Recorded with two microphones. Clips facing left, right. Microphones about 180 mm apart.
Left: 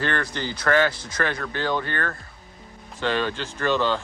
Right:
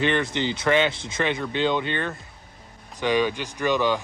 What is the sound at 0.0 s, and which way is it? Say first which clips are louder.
Speech: right 4 dB; 20° right (ahead or behind).